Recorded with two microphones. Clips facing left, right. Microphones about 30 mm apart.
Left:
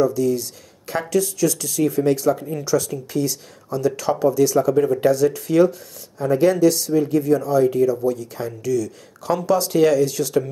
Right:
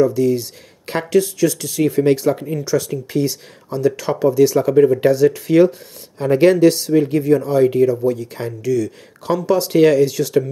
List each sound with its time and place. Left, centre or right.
0.0 s speech: right
2.6 s speech: centre
6.1 s speech: right
6.7 s speech: right
10.0 s speech: centre